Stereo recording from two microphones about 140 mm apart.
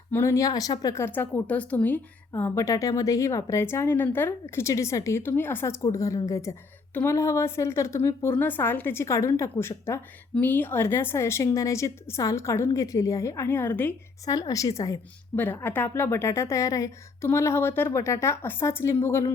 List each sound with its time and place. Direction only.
0.1 s a woman's voice: 20° left (ahead or behind)